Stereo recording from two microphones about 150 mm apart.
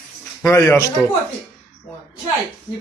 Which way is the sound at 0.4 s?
15° left (ahead or behind).